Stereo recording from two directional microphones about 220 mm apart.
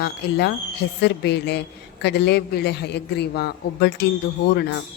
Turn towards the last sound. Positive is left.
turn(degrees=50)  # may be behind; listen again after turning